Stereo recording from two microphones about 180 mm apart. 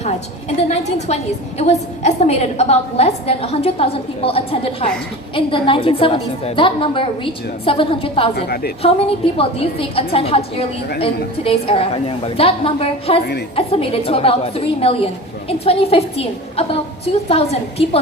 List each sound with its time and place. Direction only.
0.7 s a woman's voice: 40° left (ahead or behind)
8.4 s a woman's voice: 60° left (ahead or behind)
8.8 s a woman's voice: 30° left (ahead or behind)